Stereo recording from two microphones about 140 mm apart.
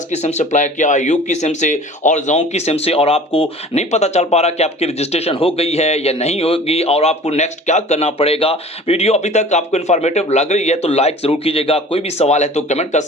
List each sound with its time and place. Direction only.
0.1 s speech: 55° left (ahead or behind)